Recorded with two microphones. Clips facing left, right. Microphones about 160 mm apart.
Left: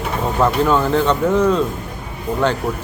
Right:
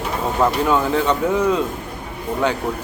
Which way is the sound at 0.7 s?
5° right (ahead or behind).